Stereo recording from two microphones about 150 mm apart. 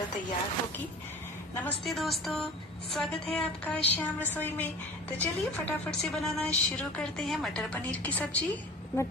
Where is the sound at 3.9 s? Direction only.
15° left (ahead or behind).